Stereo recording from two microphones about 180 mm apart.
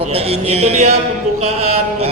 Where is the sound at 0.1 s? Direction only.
35° right (ahead or behind).